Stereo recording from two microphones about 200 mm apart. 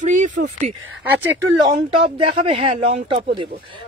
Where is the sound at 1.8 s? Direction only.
25° right (ahead or behind).